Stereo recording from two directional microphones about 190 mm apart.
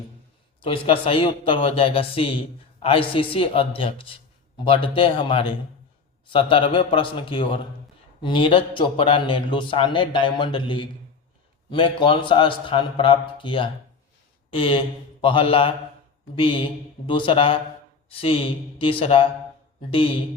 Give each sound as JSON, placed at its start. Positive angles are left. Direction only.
{"t": 0.6, "sound": "a man's voice", "side_deg": 30}